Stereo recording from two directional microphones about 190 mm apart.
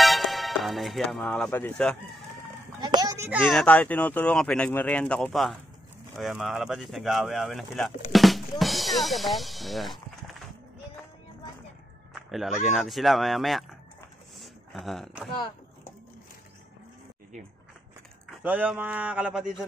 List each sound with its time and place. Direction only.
0.0 s music: centre (ahead or behind)
2.8 s children playing: 20° right (ahead or behind)
3.3 s speech: 5° right (ahead or behind)
12.1 s speech: centre (ahead or behind)
14.4 s a sound: centre (ahead or behind)
18.4 s speech: 10° right (ahead or behind)